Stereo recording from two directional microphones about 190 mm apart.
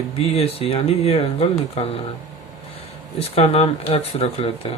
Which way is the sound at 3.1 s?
30° left (ahead or behind).